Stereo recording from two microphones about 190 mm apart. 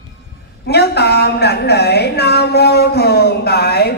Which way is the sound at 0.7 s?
60° left (ahead or behind).